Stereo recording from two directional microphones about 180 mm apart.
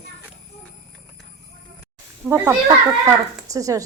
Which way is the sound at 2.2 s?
10° right (ahead or behind).